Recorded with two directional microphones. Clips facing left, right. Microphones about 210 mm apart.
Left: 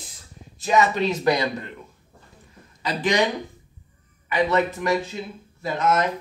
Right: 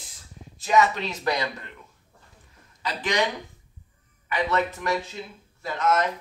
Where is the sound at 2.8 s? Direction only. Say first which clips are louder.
Left 4 dB; 15° left (ahead or behind).